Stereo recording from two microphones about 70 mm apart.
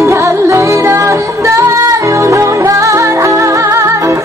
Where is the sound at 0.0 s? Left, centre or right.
Right.